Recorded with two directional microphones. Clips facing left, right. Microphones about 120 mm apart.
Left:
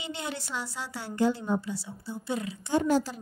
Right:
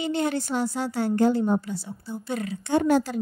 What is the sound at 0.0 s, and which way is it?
A woman's voice, 50° right (ahead or behind).